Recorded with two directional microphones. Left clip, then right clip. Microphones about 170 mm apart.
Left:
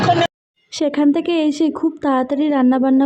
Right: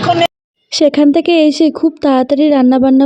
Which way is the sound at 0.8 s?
40° right (ahead or behind).